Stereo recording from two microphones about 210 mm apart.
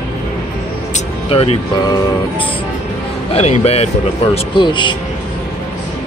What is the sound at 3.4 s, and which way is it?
Speech, 30° left (ahead or behind).